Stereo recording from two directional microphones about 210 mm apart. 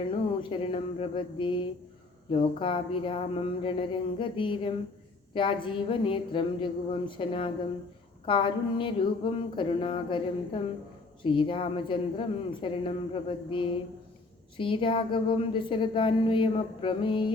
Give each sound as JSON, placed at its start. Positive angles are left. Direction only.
{"t": 0.0, "sound": "a woman's voice", "side_deg": 25}